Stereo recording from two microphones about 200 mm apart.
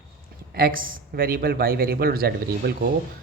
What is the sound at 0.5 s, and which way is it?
Speech, 45° right (ahead or behind).